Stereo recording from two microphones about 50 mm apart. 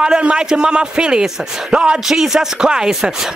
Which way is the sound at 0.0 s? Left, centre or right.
Centre.